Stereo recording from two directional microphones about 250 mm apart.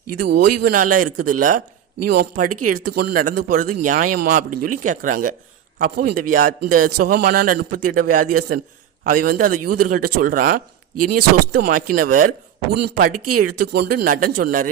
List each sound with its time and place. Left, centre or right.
0.2 s speech: right
13.1 s speech: right
13.4 s speech: right